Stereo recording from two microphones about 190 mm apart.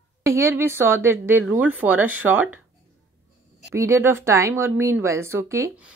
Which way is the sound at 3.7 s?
15° right (ahead or behind).